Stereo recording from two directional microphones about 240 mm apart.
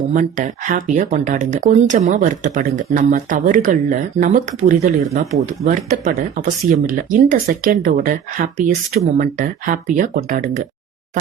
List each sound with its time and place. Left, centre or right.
0.1 s speech: right